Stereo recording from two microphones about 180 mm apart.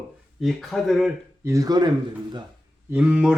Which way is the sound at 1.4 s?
20° right (ahead or behind).